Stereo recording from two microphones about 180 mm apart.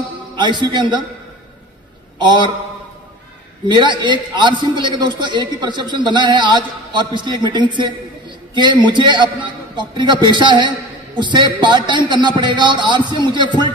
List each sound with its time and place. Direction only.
0.4 s a man's voice: 25° right (ahead or behind)
2.1 s a man's voice: 25° right (ahead or behind)
3.6 s a man's voice: 25° right (ahead or behind)